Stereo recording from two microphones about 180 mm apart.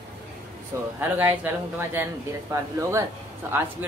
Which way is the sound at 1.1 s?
10° right (ahead or behind).